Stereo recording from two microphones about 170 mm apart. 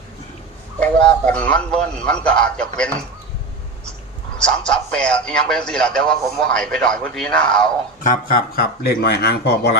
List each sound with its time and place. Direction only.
0.8 s a man's voice: 5° left (ahead or behind)
4.4 s a man's voice: 5° left (ahead or behind)
8.0 s speech: 55° left (ahead or behind); by 9.7 s 75° left (ahead or behind)